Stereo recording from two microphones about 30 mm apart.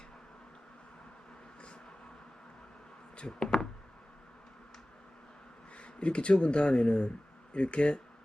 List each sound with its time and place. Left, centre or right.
3.2 s speech: left
5.7 s a sound: left
6.4 s speech: left